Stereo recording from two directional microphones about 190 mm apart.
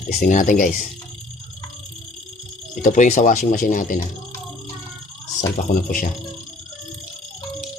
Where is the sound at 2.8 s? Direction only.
40° left (ahead or behind).